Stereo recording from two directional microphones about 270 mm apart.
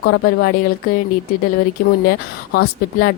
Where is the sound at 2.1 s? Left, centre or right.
Left.